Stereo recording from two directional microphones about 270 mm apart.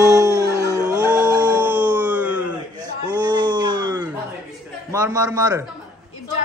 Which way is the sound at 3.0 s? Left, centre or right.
Centre.